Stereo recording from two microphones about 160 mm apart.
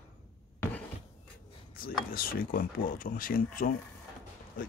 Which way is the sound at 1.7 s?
65° left (ahead or behind).